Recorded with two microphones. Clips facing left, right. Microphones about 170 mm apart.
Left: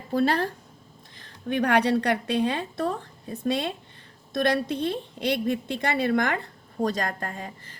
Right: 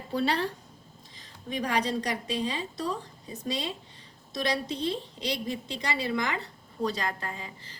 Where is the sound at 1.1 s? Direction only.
60° left (ahead or behind).